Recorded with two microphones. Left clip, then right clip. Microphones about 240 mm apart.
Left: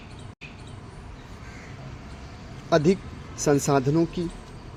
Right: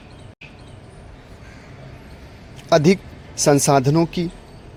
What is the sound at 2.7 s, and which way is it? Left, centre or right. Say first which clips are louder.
A man's voice: right 6 dB; right.